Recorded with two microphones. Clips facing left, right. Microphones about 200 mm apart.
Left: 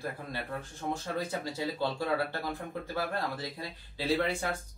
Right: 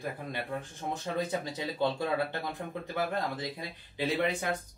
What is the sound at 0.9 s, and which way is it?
Speech, 20° right (ahead or behind).